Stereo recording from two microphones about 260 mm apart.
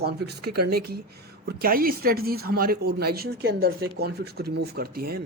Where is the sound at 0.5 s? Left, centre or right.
Right.